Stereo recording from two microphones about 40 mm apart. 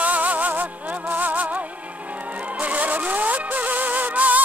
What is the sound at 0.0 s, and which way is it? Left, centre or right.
Music, right.